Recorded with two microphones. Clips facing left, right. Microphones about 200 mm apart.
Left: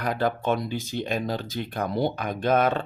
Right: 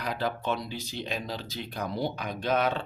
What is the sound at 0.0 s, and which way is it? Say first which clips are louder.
Speech: left 5 dB; 50° left (ahead or behind).